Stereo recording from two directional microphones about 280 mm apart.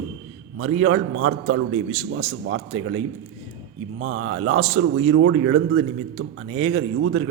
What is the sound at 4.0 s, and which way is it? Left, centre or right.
A man's voice, right.